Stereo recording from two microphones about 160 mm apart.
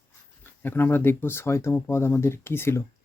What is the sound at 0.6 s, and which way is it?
Speech, 15° left (ahead or behind).